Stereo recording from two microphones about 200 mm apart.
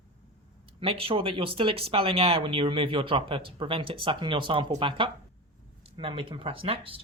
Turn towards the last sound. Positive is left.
turn(degrees=-25)  # may be behind; listen again after turning